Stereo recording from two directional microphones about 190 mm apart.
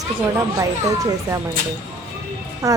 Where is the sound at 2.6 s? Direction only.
15° right (ahead or behind).